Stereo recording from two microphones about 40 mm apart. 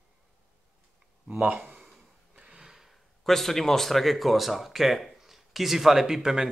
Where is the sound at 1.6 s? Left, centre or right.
Centre.